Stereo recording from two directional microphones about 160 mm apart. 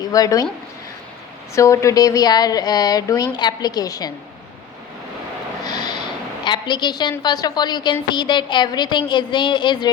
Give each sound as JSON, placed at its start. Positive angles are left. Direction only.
{"t": 0.0, "sound": "speech", "side_deg": 20}
{"t": 1.5, "sound": "a woman's voice", "side_deg": 20}
{"t": 5.6, "sound": "snort", "side_deg": 25}
{"t": 6.4, "sound": "a woman's voice", "side_deg": 30}